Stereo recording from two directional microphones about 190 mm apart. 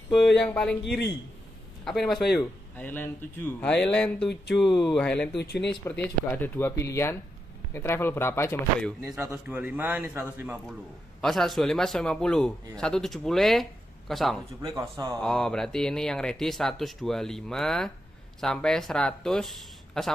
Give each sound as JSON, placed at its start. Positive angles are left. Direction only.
{"t": 0.1, "sound": "a man's voice", "side_deg": 5}
{"t": 0.8, "sound": "speech", "side_deg": 60}
{"t": 1.9, "sound": "a man's voice", "side_deg": 0}
{"t": 2.7, "sound": "a man's voice", "side_deg": 10}
{"t": 5.3, "sound": "speech", "side_deg": 60}
{"t": 5.9, "sound": "speech", "side_deg": 10}
{"t": 9.0, "sound": "a man's voice", "side_deg": -10}
{"t": 11.1, "sound": "a man's voice", "side_deg": 0}
{"t": 14.6, "sound": "speech", "side_deg": -20}
{"t": 15.2, "sound": "a man's voice", "side_deg": 5}